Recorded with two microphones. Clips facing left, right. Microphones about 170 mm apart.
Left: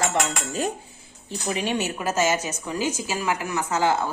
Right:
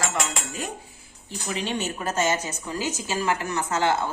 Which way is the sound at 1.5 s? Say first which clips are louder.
Left 2 dB; 15° left (ahead or behind).